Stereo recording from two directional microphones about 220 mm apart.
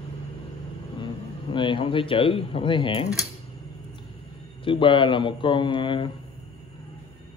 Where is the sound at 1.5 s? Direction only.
20° left (ahead or behind).